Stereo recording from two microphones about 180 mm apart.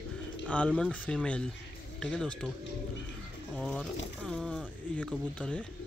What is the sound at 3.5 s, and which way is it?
Speech, centre (ahead or behind).